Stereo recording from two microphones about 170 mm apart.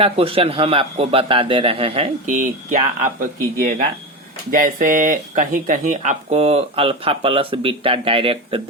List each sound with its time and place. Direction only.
0.0 s speech: 35° right (ahead or behind)
2.2 s speech: 45° right (ahead or behind)